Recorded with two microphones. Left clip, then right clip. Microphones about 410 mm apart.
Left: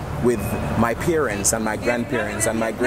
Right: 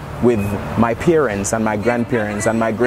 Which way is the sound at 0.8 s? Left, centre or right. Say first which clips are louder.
Right 6 dB; right.